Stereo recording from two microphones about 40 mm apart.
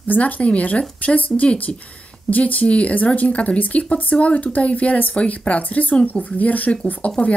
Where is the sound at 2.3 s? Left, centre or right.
Left.